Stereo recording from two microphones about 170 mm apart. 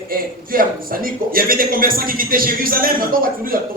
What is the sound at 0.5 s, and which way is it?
A man's voice, 55° right (ahead or behind).